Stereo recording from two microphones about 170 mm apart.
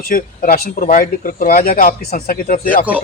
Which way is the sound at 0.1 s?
55° left (ahead or behind).